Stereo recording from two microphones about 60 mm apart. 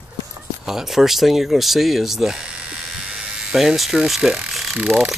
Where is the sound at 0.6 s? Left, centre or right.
Centre.